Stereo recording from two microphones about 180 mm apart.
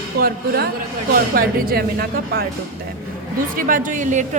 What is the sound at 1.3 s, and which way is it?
A woman's voice, 55° right (ahead or behind).